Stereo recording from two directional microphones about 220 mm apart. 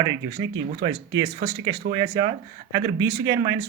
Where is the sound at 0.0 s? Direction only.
15° right (ahead or behind).